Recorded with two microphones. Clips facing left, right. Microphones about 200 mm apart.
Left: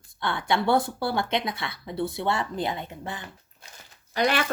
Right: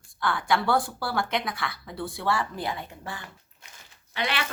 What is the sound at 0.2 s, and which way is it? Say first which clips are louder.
Speech: even; 25° left (ahead or behind).